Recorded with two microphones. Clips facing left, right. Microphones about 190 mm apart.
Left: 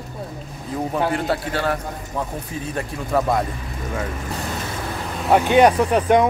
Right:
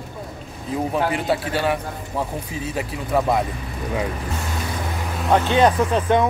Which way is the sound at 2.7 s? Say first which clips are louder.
Even; centre (ahead or behind).